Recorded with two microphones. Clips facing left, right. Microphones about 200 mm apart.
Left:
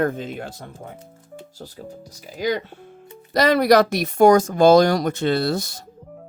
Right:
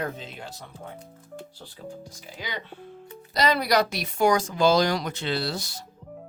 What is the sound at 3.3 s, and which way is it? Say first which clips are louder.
Speech: left 7 dB; 50° left (ahead or behind).